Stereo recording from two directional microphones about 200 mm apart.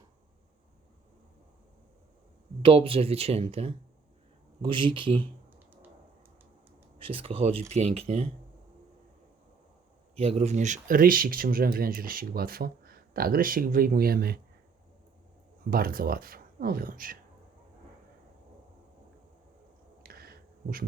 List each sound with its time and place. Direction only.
2.6 s speech: 25° right (ahead or behind)
5.5 s a sound: 10° right (ahead or behind)
7.0 s speech: 25° right (ahead or behind)
10.2 s speech: 30° right (ahead or behind); by 14.3 s 50° right (ahead or behind)
15.7 s speech: 45° right (ahead or behind)
20.0 s a sound: 50° right (ahead or behind)